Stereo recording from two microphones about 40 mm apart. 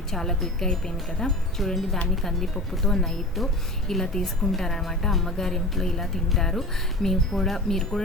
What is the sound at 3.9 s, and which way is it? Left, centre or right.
A woman's voice, centre.